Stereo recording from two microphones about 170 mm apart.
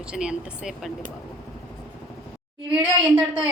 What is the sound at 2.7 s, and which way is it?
Speech, 5° right (ahead or behind).